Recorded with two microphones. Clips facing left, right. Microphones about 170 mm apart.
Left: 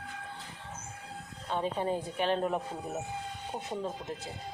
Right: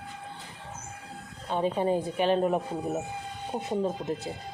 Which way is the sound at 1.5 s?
15° right (ahead or behind).